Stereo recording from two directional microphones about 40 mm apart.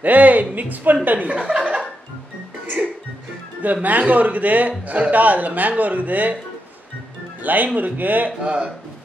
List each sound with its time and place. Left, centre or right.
0.0 s a woman's voice: right
3.6 s a woman's voice: right
7.4 s a woman's voice: right
8.4 s speech: right